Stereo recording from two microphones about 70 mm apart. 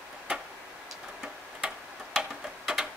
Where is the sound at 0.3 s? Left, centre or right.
Centre.